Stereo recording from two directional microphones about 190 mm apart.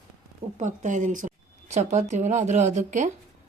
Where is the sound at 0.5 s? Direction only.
40° right (ahead or behind).